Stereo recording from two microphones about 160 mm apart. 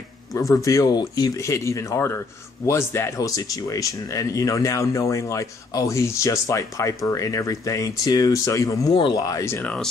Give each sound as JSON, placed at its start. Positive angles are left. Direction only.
{"t": 0.3, "sound": "speech", "side_deg": 20}